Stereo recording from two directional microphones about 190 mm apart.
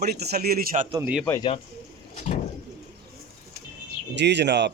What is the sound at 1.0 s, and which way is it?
Speech, 5° right (ahead or behind).